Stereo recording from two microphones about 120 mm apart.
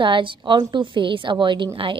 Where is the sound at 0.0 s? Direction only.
45° right (ahead or behind).